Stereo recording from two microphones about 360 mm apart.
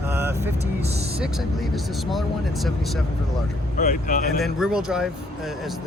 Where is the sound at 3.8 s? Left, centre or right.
Left.